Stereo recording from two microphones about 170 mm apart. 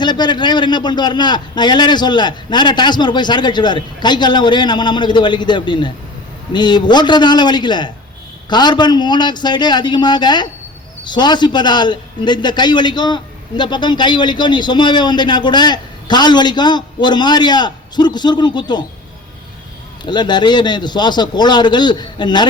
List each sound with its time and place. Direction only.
0.0 s a man's voice: 25° left (ahead or behind)
20.1 s a man's voice: 25° left (ahead or behind)